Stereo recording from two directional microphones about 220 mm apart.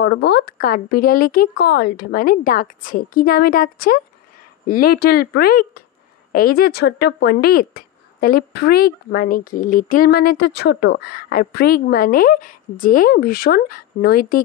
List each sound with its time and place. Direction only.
0.0 s speech: 50° left (ahead or behind)